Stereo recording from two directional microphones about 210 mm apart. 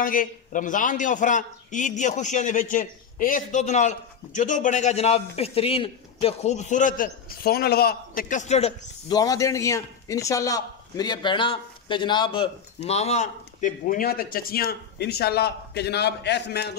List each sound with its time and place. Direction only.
0.0 s a man's voice: 40° left (ahead or behind)
9.1 s a man's voice: 15° left (ahead or behind); by 16.7 s 55° left (ahead or behind)